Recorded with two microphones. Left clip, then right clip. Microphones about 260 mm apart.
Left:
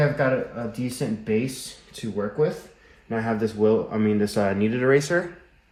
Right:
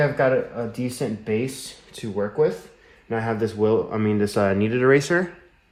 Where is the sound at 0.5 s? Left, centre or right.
Right.